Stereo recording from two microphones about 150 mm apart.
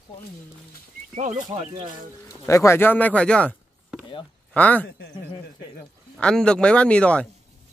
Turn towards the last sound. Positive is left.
turn(degrees=10)  # may be behind; listen again after turning